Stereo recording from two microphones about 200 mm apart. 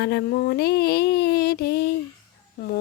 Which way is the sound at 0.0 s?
55° left (ahead or behind).